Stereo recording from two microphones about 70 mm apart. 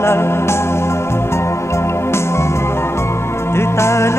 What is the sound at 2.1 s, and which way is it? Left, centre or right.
Music, left.